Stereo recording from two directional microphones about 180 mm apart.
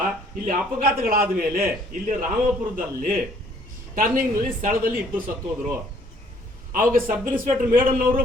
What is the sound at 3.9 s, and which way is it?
Speech, 50° right (ahead or behind).